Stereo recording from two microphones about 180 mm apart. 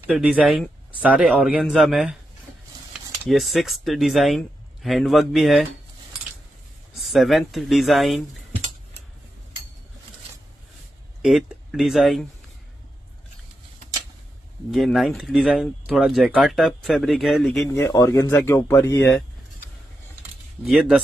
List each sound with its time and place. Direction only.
0.1 s speech: 5° right (ahead or behind)
3.3 s speech: centre (ahead or behind)
6.9 s speech: centre (ahead or behind)
11.2 s speech: centre (ahead or behind)
14.7 s speech: centre (ahead or behind)
17.7 s speech: 15° left (ahead or behind)
20.6 s speech: centre (ahead or behind)